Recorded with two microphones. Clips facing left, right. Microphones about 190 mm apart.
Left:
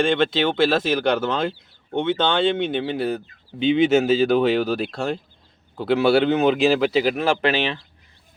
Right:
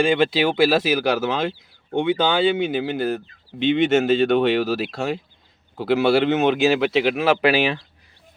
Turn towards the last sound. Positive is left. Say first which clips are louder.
# right 3 dB
turn(degrees=-10)  # may be behind; listen again after turning